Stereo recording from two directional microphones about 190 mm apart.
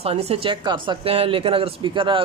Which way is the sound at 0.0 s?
30° right (ahead or behind).